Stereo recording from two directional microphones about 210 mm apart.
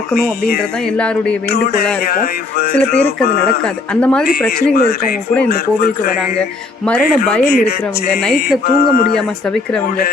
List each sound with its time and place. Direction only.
0.9 s speech: 5° left (ahead or behind)
1.7 s speech: 45° left (ahead or behind)
4.0 s speech: 5° left (ahead or behind)
4.7 s speech: 45° left (ahead or behind)
6.8 s speech: 5° left (ahead or behind)
7.4 s speech: 45° left (ahead or behind)
8.1 s speech: 5° left (ahead or behind)
8.6 s speech: 45° left (ahead or behind)